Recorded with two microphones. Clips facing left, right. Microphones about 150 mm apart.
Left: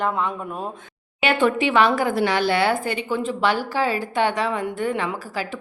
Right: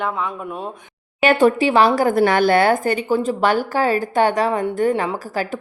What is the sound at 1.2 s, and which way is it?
Speech, 40° right (ahead or behind).